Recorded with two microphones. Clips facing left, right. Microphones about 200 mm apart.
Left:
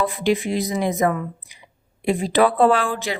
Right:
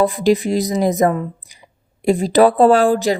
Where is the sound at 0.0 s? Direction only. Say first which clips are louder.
Right 6 dB; 40° right (ahead or behind).